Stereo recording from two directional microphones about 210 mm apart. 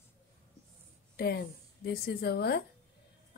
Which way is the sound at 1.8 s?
50° left (ahead or behind).